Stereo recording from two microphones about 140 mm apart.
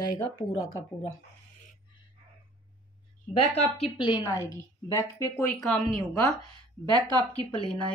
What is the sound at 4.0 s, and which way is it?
Speech, 35° left (ahead or behind).